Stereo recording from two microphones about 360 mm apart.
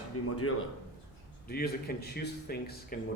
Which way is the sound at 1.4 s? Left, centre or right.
Left.